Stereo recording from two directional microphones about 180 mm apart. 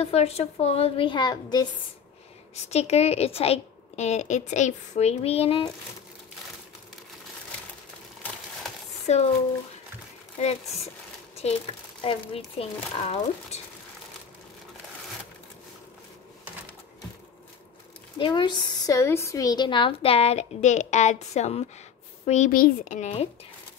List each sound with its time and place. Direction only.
0.0 s a woman's voice: 35° left (ahead or behind)
2.7 s a woman's voice: 35° left (ahead or behind)
9.0 s speech: 35° left (ahead or behind)
11.4 s a woman's voice: 35° left (ahead or behind)
18.1 s a woman's voice: 25° left (ahead or behind)